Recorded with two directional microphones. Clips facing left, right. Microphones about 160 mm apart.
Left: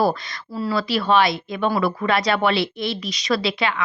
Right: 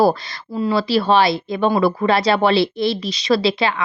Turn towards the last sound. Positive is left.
turn(degrees=-30)  # may be behind; listen again after turning